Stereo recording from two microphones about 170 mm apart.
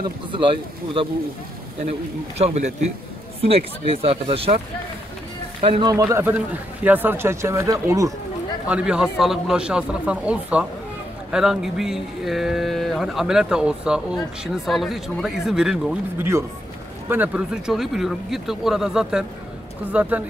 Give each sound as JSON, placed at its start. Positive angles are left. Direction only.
{"t": 1.9, "sound": "speech", "side_deg": -40}
{"t": 5.6, "sound": "a man's voice", "side_deg": -30}
{"t": 8.6, "sound": "a man's voice", "side_deg": -5}